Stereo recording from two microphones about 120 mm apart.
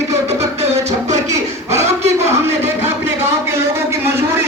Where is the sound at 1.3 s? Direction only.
25° right (ahead or behind).